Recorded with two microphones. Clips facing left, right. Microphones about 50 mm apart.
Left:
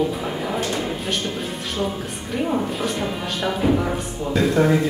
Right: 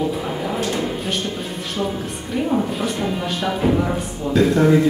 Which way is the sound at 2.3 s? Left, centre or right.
Centre.